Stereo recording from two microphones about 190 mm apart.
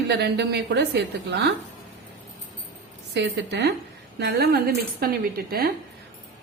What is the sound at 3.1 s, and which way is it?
Speech, 60° right (ahead or behind).